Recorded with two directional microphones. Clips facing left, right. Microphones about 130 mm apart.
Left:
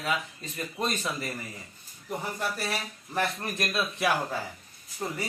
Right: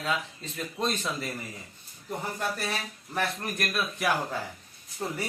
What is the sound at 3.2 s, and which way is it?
Speech, 20° left (ahead or behind).